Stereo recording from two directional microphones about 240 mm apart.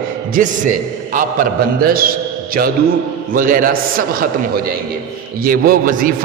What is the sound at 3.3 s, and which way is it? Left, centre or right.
A man's voice, right.